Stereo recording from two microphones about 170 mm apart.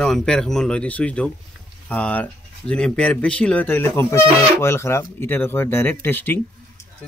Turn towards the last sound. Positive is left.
turn(degrees=10)  # may be behind; listen again after turning